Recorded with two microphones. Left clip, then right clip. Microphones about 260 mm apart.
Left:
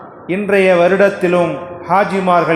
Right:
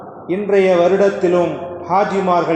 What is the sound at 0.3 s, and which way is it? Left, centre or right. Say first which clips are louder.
A man's voice: left 2 dB; left.